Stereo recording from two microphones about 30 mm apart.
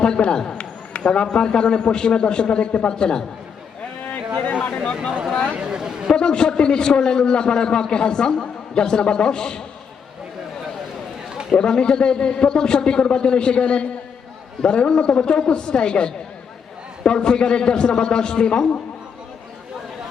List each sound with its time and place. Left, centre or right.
0.0 s a man's voice: left
0.6 s a sound: left
1.3 s a man's voice: left
4.7 s a sound: left
5.5 s chatter: right
6.1 s a man's voice: left
11.6 s a man's voice: left